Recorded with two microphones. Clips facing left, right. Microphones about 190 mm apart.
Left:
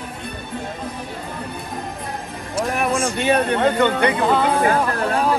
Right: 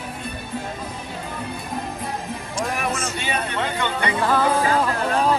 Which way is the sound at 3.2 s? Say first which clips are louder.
Left 8 dB; 60° left (ahead or behind).